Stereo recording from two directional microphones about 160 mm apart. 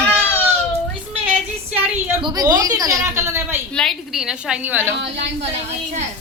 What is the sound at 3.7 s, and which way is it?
A woman's voice, 5° left (ahead or behind).